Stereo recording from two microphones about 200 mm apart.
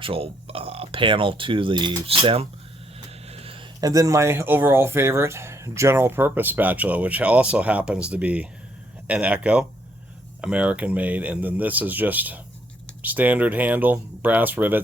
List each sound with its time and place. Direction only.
0.0 s speech: 30° right (ahead or behind); by 14.8 s 10° right (ahead or behind)